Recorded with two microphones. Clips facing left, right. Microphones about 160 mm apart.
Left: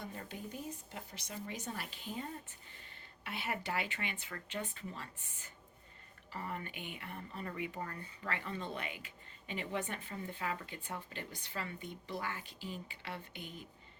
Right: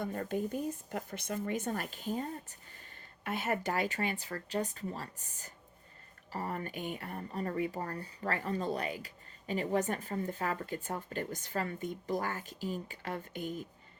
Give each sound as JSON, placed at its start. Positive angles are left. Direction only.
{"t": 0.0, "sound": "speech", "side_deg": -50}